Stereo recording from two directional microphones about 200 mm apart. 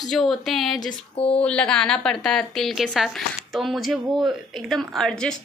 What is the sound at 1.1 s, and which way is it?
Speech, 30° left (ahead or behind).